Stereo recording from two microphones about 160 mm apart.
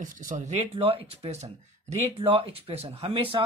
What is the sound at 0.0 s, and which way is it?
Speech, 55° right (ahead or behind).